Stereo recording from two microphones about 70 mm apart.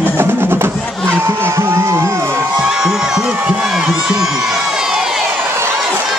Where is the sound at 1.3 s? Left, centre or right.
Right.